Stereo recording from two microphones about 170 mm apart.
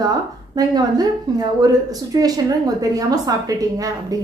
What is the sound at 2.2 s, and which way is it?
A woman's voice, 20° right (ahead or behind).